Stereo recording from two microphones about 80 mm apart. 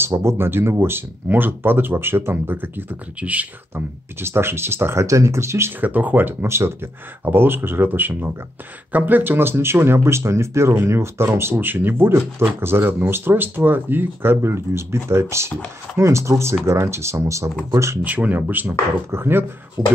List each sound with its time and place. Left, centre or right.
0.0 s speech: right; by 3.4 s centre
3.7 s speech: right
5.8 s speech: right
18.0 s speech: centre
19.8 s speech: right